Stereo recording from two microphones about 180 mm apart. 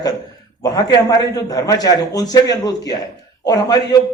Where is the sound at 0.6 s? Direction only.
20° left (ahead or behind).